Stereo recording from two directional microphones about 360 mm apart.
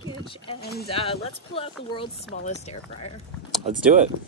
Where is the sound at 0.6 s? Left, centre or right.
Left.